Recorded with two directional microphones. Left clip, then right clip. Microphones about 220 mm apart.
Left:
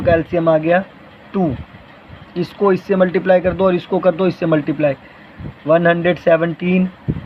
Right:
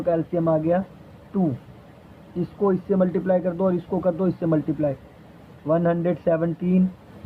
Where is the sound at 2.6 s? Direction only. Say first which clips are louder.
Left 7 dB; 20° left (ahead or behind).